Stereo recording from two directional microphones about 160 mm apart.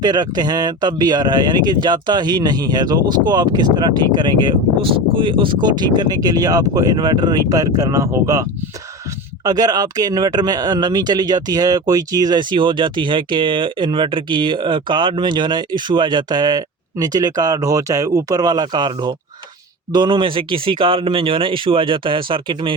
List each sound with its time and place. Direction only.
0.0 s speech: 25° right (ahead or behind)